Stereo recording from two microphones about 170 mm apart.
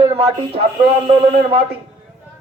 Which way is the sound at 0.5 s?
35° right (ahead or behind).